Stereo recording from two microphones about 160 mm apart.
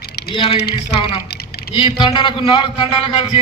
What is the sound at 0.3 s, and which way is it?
Speech, 35° left (ahead or behind).